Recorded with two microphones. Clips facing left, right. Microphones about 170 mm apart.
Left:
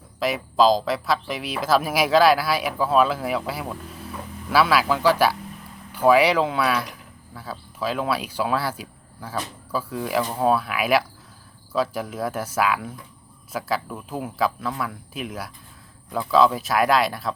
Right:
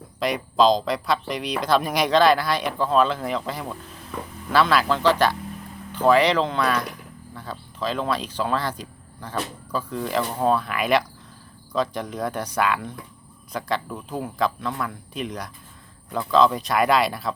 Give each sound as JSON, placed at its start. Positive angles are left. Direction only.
{"t": 0.2, "sound": "speech", "side_deg": 5}